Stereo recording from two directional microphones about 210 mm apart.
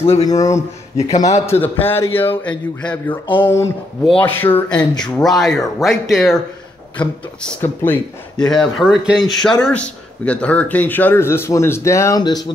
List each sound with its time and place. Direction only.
0.0 s speech: 30° left (ahead or behind)
0.3 s speech: 15° left (ahead or behind)